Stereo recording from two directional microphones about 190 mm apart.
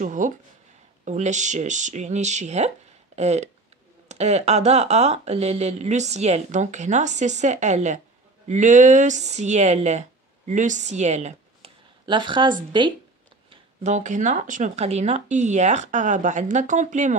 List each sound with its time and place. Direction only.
0.0 s speech: 45° right (ahead or behind)
12.1 s speech: 25° right (ahead or behind)
13.5 s speech: 40° right (ahead or behind)